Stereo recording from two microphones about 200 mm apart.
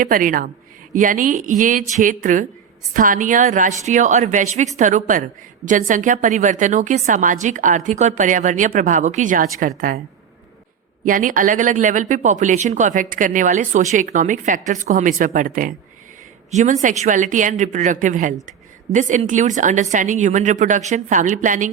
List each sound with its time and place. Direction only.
0.0 s a woman's voice: 45° right (ahead or behind)
11.0 s speech: 40° right (ahead or behind)